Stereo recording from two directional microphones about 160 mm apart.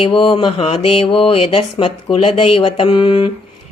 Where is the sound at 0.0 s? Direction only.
35° left (ahead or behind).